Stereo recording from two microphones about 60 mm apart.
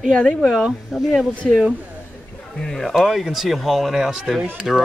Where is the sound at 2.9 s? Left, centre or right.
Centre.